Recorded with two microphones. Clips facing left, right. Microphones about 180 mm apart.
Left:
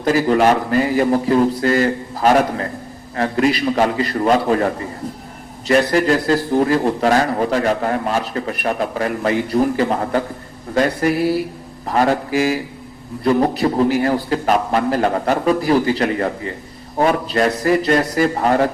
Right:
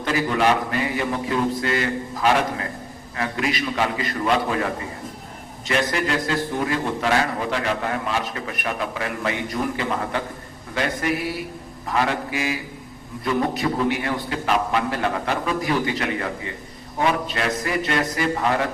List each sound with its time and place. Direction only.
0.0 s a man's voice: 40° left (ahead or behind)